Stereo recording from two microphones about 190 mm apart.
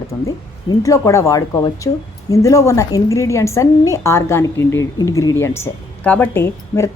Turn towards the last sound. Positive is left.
turn(degrees=10)  # may be behind; listen again after turning